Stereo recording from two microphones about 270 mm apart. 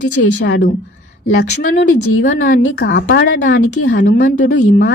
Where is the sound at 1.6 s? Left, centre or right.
Left.